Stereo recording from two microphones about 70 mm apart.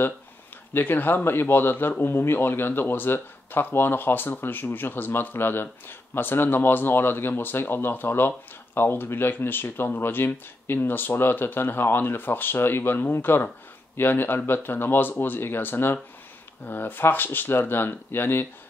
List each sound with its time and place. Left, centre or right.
0.7 s a man's voice: left